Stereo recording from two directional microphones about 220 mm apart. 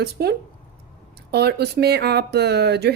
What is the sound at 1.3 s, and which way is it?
Speech, 45° right (ahead or behind).